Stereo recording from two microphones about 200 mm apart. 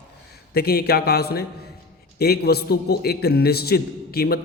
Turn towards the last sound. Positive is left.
turn(degrees=50)  # may be behind; listen again after turning